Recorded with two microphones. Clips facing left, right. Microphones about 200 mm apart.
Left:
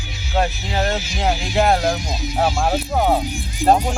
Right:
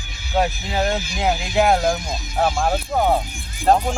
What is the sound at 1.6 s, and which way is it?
Speech, 5° right (ahead or behind).